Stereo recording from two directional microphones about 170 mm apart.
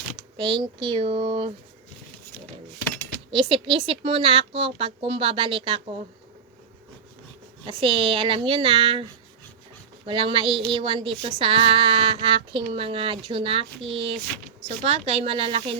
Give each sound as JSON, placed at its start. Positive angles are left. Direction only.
{"t": 0.3, "sound": "speech", "side_deg": -30}
{"t": 3.3, "sound": "speech", "side_deg": -30}
{"t": 7.7, "sound": "speech", "side_deg": -30}
{"t": 10.1, "sound": "speech", "side_deg": -30}